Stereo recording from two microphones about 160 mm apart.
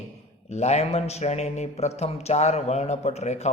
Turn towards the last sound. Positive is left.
turn(degrees=45)  # may be behind; listen again after turning